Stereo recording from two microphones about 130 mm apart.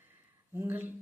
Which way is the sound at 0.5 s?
15° right (ahead or behind).